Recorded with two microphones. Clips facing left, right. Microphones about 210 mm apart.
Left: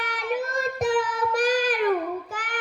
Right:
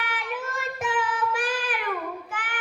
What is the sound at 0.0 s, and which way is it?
Child singing, 40° left (ahead or behind).